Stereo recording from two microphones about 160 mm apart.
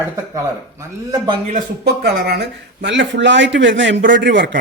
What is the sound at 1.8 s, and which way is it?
Speech, 75° right (ahead or behind).